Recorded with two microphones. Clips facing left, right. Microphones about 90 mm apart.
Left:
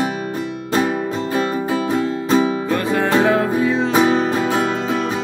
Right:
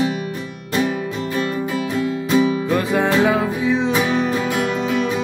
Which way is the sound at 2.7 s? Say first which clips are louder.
Even; 15° right (ahead or behind).